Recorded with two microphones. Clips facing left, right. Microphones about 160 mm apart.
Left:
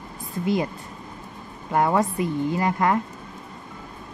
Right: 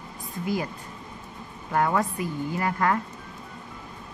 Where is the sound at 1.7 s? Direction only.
20° left (ahead or behind).